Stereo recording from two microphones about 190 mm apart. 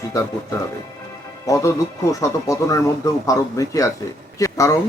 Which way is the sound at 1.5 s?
15° left (ahead or behind).